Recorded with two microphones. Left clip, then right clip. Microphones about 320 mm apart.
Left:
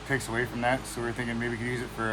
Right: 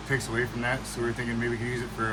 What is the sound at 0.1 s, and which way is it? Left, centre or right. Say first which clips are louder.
Speech: right 1 dB; left.